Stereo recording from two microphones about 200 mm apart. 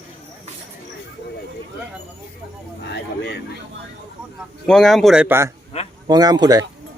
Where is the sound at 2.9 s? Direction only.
55° left (ahead or behind).